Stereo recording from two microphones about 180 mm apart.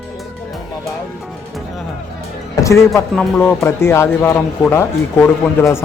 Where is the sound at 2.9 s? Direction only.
Centre (ahead or behind).